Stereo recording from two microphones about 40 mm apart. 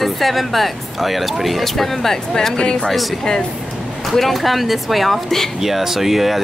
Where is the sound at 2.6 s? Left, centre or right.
Left.